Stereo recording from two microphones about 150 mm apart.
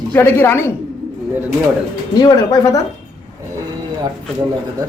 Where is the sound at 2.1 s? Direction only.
25° left (ahead or behind).